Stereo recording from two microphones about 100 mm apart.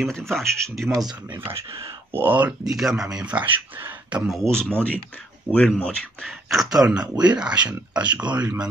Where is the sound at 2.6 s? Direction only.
5° right (ahead or behind); by 4.2 s 20° right (ahead or behind).